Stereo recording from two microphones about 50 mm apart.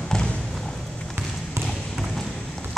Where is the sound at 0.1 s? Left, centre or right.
Centre.